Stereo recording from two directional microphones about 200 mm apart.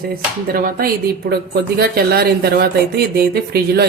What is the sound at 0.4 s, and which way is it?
Speech, 45° right (ahead or behind).